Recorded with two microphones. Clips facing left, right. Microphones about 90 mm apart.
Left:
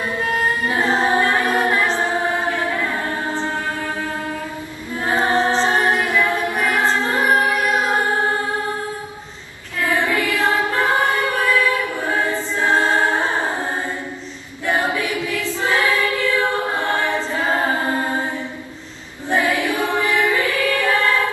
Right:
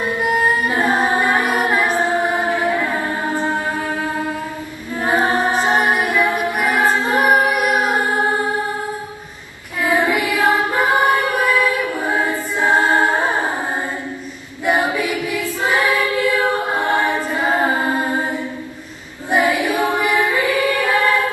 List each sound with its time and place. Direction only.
0.2 s a capella: 15° right (ahead or behind)
4.9 s a capella: 15° right (ahead or behind)
9.8 s choir: 15° right (ahead or behind)
14.7 s choir: 15° right (ahead or behind)
19.3 s music: 15° right (ahead or behind)